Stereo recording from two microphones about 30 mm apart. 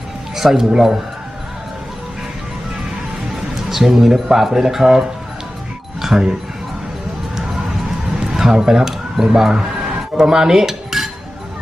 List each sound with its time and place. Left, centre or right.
0.3 s speech: centre
3.3 s speech: centre
6.0 s music: centre
8.2 s music: centre
9.2 s speech: centre
10.2 s cutlery: centre